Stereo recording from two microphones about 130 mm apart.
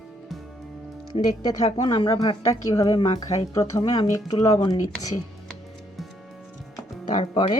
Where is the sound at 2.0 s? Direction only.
25° left (ahead or behind).